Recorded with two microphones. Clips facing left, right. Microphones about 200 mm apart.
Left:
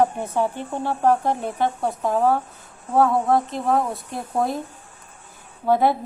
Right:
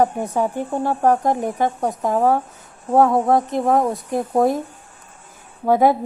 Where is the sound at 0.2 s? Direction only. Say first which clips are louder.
Right 3 dB; 15° right (ahead or behind).